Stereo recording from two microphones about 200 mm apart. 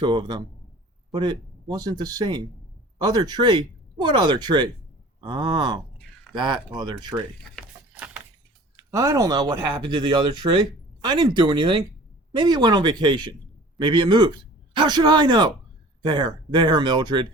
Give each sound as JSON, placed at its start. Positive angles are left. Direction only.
{"t": 0.0, "sound": "speech", "side_deg": -20}
{"t": 7.5, "sound": "a sound", "side_deg": -5}
{"t": 8.7, "sound": "speech", "side_deg": -15}